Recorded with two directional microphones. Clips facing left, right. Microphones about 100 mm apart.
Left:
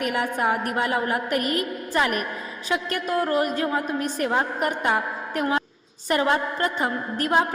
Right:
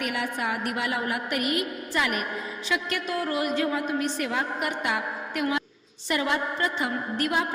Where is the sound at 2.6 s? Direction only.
45° left (ahead or behind).